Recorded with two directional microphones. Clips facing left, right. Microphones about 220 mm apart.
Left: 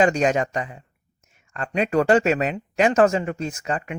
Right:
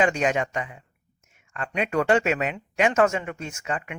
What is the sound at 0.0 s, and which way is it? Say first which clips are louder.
Speech: left 4 dB; 40° left (ahead or behind).